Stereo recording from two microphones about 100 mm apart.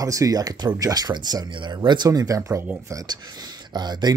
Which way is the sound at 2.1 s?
35° right (ahead or behind).